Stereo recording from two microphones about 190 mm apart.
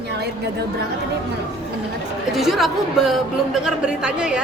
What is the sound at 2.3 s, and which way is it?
A woman's voice, centre (ahead or behind).